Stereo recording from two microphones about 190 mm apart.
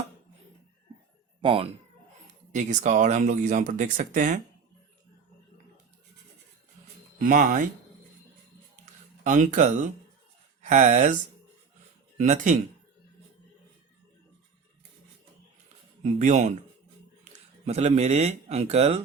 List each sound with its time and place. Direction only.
1.4 s speech: 25° right (ahead or behind)
2.5 s speech: 40° right (ahead or behind)
7.2 s speech: 45° right (ahead or behind)
9.2 s speech: 40° right (ahead or behind)
16.0 s speech: 40° right (ahead or behind)
17.7 s speech: 35° right (ahead or behind)